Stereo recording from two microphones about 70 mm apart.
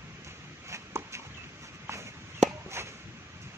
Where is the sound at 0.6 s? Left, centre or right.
Right.